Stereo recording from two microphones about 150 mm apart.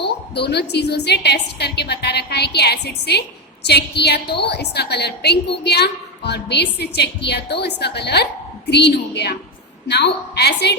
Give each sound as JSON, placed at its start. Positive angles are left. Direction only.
{"t": 0.0, "sound": "a woman's voice", "side_deg": 90}